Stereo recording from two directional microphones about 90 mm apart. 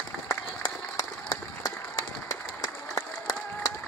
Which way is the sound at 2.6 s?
40° left (ahead or behind).